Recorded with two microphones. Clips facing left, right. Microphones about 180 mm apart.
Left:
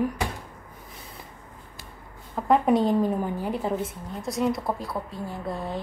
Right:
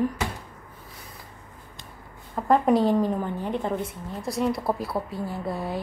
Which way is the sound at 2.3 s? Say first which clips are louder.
Even; centre (ahead or behind).